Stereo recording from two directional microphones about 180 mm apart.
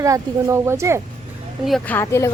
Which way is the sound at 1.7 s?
5° left (ahead or behind).